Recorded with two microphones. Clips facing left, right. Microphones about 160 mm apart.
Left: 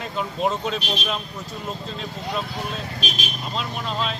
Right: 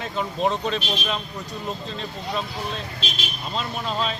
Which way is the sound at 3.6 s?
Centre (ahead or behind).